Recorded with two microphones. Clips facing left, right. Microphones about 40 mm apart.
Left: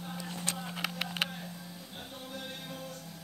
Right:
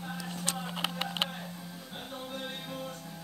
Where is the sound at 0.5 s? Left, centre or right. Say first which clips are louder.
Right 2 dB; right.